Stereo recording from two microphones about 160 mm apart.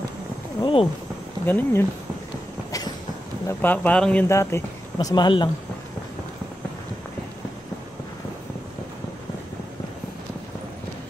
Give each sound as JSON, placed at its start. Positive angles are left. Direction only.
{"t": 0.6, "sound": "a sound", "side_deg": 30}
{"t": 1.4, "sound": "speech", "side_deg": 15}
{"t": 3.4, "sound": "speech", "side_deg": 10}
{"t": 4.9, "sound": "speech", "side_deg": 25}